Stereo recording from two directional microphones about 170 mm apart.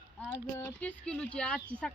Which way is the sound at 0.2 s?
10° left (ahead or behind).